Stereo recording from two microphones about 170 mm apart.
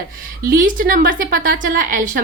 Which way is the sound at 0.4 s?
55° right (ahead or behind).